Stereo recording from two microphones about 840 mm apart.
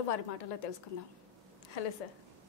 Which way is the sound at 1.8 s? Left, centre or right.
Left.